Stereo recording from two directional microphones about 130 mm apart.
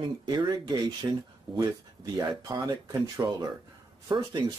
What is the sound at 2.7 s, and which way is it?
Speech, 30° right (ahead or behind).